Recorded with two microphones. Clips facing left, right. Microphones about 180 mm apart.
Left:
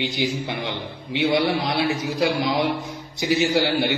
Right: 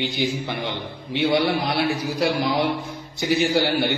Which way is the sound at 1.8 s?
20° left (ahead or behind).